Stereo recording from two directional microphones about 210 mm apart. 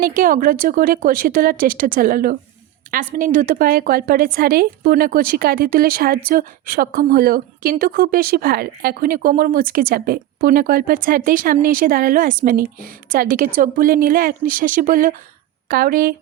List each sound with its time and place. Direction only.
0.0 s a woman's voice: 40° right (ahead or behind)